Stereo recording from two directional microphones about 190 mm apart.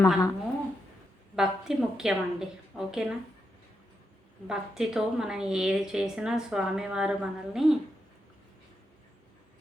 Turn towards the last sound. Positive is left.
turn(degrees=0)  # may be behind; listen again after turning